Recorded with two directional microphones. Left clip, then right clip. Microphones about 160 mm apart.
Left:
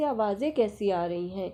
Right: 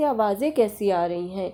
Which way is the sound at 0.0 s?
35° right (ahead or behind).